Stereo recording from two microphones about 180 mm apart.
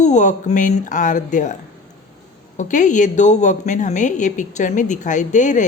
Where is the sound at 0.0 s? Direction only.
40° left (ahead or behind).